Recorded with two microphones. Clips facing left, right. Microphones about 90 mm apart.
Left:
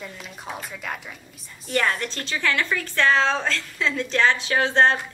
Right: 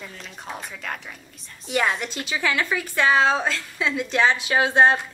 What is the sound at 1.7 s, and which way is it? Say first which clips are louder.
A woman's voice: even; 10° right (ahead or behind).